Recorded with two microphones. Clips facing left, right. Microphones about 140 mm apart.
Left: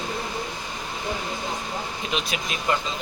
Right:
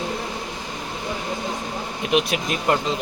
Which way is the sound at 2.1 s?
60° right (ahead or behind).